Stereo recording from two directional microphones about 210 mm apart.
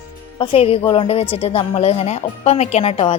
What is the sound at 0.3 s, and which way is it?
A woman's voice, 25° left (ahead or behind).